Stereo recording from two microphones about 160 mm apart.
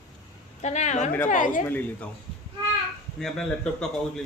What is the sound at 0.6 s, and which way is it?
A woman's voice, 45° left (ahead or behind).